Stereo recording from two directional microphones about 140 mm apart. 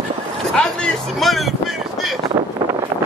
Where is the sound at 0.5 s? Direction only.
5° left (ahead or behind).